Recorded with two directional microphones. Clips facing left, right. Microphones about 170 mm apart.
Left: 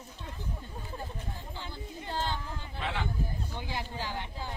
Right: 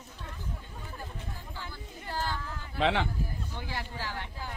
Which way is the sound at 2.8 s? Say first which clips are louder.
Right 9 dB; 90° right.